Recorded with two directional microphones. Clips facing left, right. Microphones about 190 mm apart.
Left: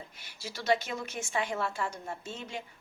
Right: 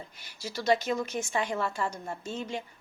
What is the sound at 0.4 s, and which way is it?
A woman's voice, 5° left (ahead or behind).